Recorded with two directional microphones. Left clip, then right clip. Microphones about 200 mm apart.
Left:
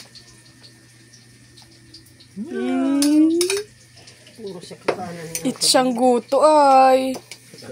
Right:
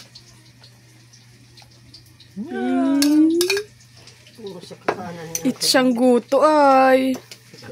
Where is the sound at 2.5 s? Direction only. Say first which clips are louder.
Right 1 dB; 45° right (ahead or behind).